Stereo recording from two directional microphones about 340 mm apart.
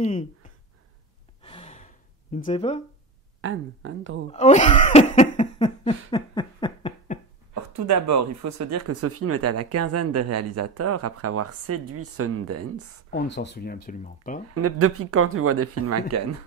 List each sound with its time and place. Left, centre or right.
0.0 s speech: left
1.4 s gasp: centre
2.3 s speech: centre
3.3 s speech: right
4.3 s speech: centre
7.7 s speech: right
13.1 s speech: left
14.5 s speech: right